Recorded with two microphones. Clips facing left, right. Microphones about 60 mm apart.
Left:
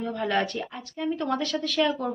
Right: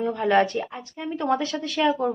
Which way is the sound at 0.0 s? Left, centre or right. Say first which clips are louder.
Right 6 dB; centre.